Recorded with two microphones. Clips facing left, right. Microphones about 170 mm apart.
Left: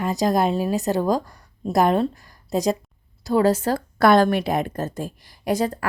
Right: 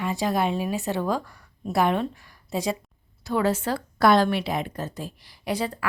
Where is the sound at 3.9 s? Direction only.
50° left (ahead or behind).